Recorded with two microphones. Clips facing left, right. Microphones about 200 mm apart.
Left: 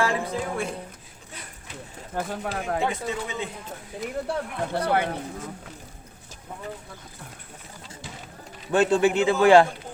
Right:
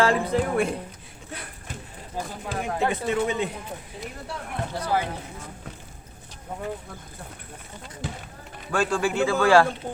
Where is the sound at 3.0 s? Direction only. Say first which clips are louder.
Right 6 dB; 60° right (ahead or behind).